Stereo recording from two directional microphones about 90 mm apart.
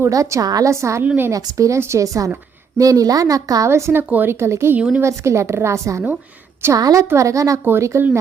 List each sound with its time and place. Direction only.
0.0 s speech: 35° right (ahead or behind)
1.0 s speech: 20° right (ahead or behind)
1.3 s speech: 40° right (ahead or behind)